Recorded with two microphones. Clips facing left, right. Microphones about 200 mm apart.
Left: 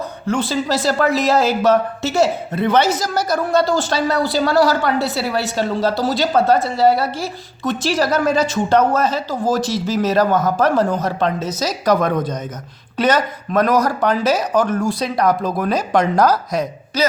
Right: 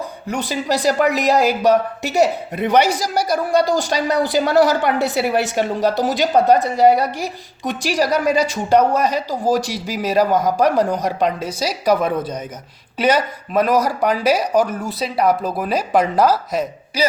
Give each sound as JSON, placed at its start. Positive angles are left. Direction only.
{"t": 0.3, "sound": "a woman's voice", "side_deg": -15}